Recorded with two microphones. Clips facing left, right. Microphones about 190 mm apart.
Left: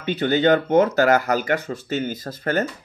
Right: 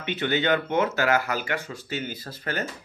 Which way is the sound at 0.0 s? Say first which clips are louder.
Left 7 dB; 40° left (ahead or behind).